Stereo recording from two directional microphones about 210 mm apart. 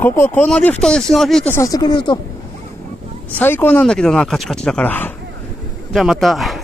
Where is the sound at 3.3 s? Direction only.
10° left (ahead or behind).